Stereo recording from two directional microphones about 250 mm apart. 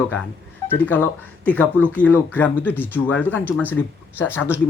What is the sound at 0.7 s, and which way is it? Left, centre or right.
Speech, centre.